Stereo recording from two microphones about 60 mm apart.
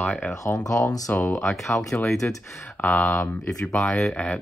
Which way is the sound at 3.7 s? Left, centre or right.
Centre.